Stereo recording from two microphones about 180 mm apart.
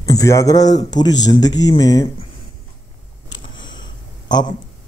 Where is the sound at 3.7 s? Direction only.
25° left (ahead or behind).